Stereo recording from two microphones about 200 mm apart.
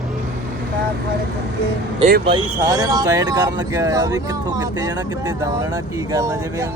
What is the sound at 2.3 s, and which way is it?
Speech, 20° right (ahead or behind).